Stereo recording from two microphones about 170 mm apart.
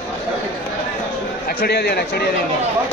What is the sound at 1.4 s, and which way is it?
Speech, 65° left (ahead or behind).